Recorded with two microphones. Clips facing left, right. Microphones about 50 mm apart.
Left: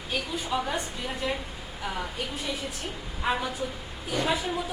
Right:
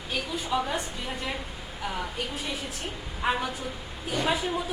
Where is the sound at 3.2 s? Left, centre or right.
Centre.